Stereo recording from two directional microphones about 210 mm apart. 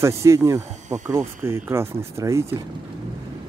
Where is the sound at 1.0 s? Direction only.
10° right (ahead or behind).